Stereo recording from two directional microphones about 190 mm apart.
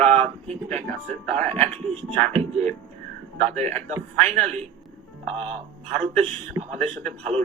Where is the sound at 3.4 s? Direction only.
35° right (ahead or behind).